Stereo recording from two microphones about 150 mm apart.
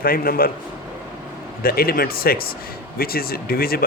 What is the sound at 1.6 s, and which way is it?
Speech, 85° left.